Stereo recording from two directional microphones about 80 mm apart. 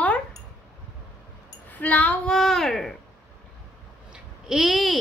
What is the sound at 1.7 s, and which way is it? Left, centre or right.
Speech, centre.